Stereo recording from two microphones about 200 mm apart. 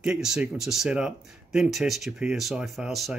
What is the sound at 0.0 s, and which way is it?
Speech, 5° right (ahead or behind).